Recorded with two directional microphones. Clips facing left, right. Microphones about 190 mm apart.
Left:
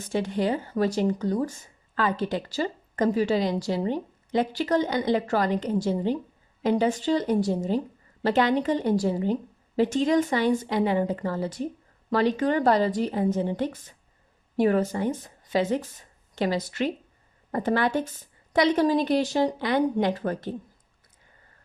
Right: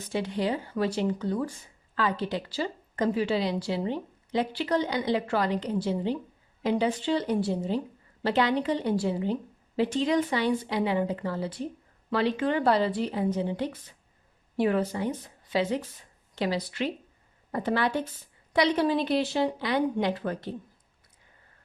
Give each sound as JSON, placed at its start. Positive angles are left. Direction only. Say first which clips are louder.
{"t": 0.1, "sound": "a woman's voice", "louder": "left 3 dB", "side_deg": 50}